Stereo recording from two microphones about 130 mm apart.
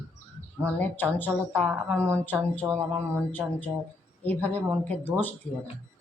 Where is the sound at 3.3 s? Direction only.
15° left (ahead or behind).